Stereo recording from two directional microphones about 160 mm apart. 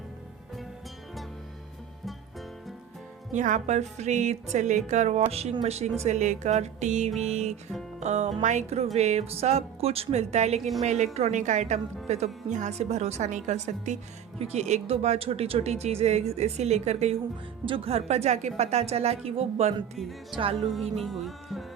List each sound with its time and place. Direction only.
3.3 s a woman's voice: 50° right (ahead or behind)
7.9 s music: 45° right (ahead or behind)
8.4 s a woman's voice: 50° right (ahead or behind)
20.6 s music: centre (ahead or behind)